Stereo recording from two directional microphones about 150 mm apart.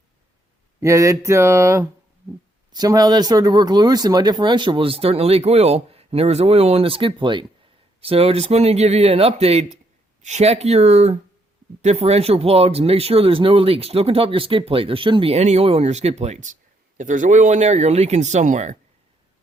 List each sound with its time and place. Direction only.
0.8 s speech: 20° right (ahead or behind); by 18.8 s 50° right (ahead or behind)